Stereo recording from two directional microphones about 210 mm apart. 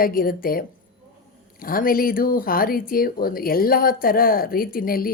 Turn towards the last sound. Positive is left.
turn(degrees=45)  # may be behind; listen again after turning